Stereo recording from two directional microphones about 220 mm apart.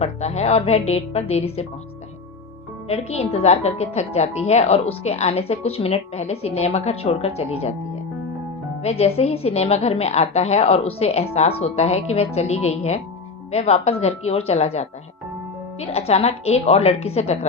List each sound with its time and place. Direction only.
0.0 s a woman's voice: 30° left (ahead or behind)
2.9 s a woman's voice: 30° left (ahead or behind)
8.8 s a woman's voice: 30° left (ahead or behind)